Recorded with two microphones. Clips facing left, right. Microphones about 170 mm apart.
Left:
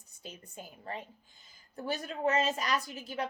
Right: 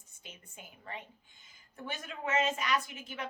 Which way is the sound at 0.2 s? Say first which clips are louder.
Left 6 dB; 35° left (ahead or behind).